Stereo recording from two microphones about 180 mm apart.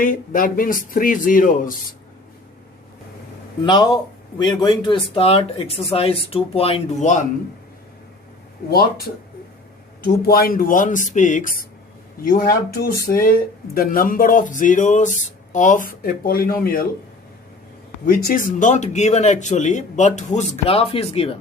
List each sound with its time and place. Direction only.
0.0 s speech: 50° left (ahead or behind)
3.6 s speech: 25° left (ahead or behind)
8.7 s speech: 60° left (ahead or behind)
18.0 s speech: 50° left (ahead or behind); by 21.3 s 35° left (ahead or behind)